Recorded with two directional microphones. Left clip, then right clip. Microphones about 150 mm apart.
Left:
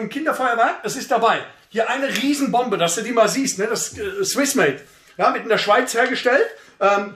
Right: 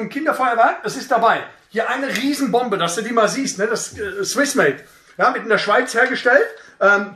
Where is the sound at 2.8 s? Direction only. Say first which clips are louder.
Even; 30° left (ahead or behind); by 7.0 s 50° left (ahead or behind).